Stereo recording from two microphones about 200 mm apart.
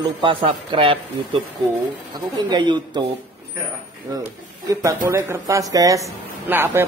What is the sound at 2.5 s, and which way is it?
Speech, 20° right (ahead or behind).